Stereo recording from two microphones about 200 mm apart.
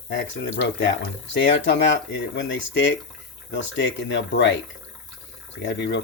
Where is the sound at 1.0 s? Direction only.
65° left (ahead or behind).